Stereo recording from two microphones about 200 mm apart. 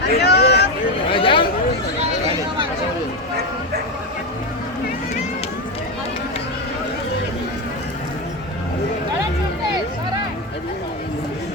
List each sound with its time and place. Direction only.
0.2 s vehicle: 55° left (ahead or behind)
1.1 s chatter: 25° left (ahead or behind)